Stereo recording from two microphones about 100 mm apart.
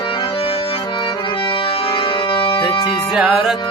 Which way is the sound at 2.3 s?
60° left (ahead or behind).